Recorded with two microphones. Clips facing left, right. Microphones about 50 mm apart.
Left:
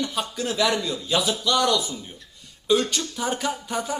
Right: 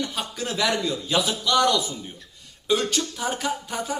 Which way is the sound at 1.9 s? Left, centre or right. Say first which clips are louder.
Even; centre.